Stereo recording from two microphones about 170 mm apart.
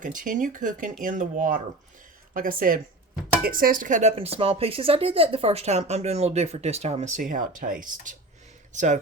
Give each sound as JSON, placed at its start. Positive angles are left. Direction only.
{"t": 0.0, "sound": "a woman's voice", "side_deg": -50}